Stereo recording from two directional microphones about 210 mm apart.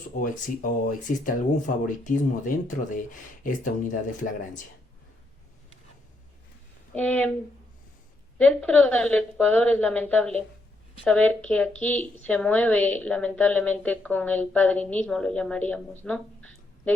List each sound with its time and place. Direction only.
0.2 s speech: 40° left (ahead or behind)
6.9 s a woman's voice: 5° left (ahead or behind)
8.4 s a woman's voice: 5° left (ahead or behind)